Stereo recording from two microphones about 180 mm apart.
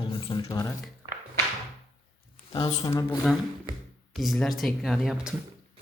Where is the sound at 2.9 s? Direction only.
15° left (ahead or behind).